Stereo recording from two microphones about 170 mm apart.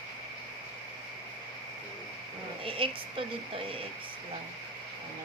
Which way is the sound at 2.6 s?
30° right (ahead or behind).